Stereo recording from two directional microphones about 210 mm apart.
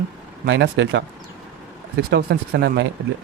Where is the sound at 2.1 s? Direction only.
50° right (ahead or behind).